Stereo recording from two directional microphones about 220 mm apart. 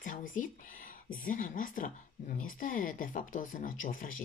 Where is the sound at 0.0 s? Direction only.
35° left (ahead or behind).